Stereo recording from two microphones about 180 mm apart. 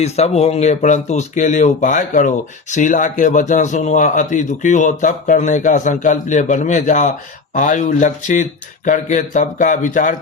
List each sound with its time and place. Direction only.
0.0 s a man's voice: 35° left (ahead or behind)